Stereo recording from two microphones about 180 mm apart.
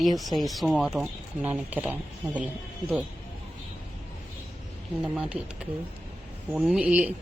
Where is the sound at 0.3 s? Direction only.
Centre (ahead or behind).